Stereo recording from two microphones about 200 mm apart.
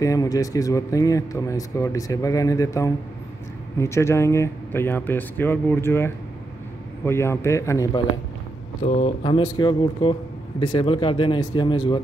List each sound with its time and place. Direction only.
0.0 s a man's voice: 15° left (ahead or behind)
8.8 s speech: 30° left (ahead or behind)